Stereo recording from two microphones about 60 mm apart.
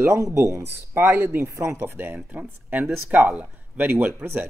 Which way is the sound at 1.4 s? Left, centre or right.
Right.